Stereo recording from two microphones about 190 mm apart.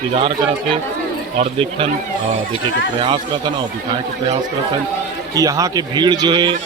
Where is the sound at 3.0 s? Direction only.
25° right (ahead or behind).